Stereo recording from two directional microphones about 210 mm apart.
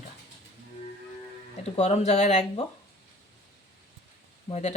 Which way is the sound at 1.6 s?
30° left (ahead or behind).